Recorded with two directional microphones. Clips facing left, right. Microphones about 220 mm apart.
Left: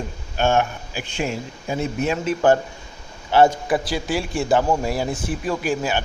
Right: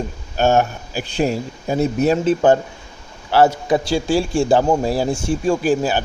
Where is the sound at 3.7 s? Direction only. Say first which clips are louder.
Right 5 dB; 25° right (ahead or behind).